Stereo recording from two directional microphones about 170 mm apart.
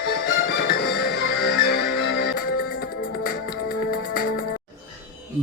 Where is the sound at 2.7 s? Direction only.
60° left (ahead or behind).